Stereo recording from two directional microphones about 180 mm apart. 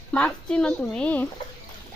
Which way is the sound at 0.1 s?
5° left (ahead or behind).